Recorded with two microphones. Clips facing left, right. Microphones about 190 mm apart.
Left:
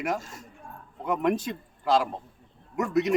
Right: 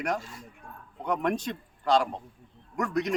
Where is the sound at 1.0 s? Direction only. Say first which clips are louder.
Left 2 dB; 5° left (ahead or behind).